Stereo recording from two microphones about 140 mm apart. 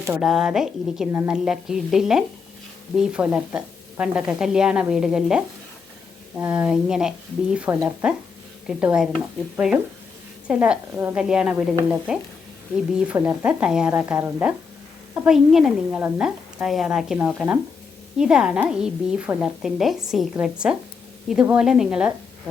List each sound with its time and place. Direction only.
0.1 s a woman's voice: 5° right (ahead or behind)
1.1 s speech: 15° right (ahead or behind)
1.5 s a woman's voice: 5° right (ahead or behind)